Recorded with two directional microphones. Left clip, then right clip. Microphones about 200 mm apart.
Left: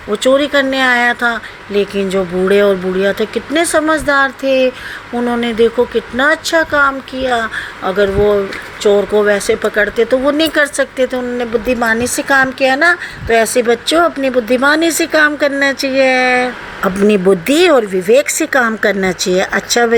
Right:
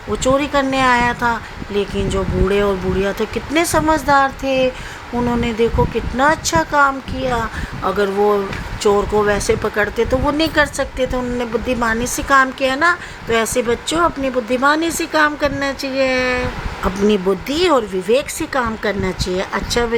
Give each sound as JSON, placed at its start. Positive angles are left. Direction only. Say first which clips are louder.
{"t": 0.1, "sound": "speech", "louder": "left 5 dB", "side_deg": 10}